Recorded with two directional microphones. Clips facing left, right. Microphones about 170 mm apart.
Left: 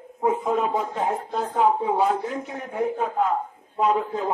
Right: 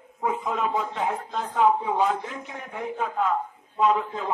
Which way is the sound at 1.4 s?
30° left (ahead or behind).